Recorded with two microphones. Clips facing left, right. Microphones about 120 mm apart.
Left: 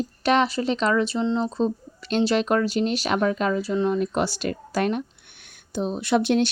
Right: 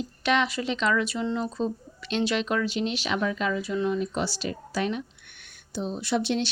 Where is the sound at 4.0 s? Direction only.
55° left (ahead or behind).